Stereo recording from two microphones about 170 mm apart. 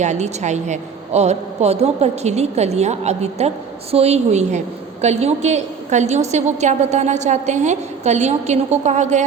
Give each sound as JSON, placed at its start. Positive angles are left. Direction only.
{"t": 0.0, "sound": "a woman's voice", "side_deg": -45}